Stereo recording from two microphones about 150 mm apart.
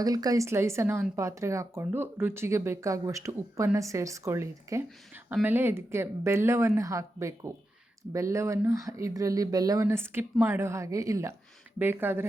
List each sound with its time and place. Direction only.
0.0 s speech: 25° right (ahead or behind)